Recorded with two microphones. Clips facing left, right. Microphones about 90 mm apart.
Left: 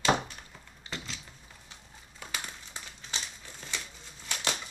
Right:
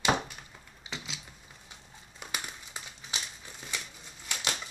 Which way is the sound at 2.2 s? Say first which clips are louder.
Even; 15° right (ahead or behind).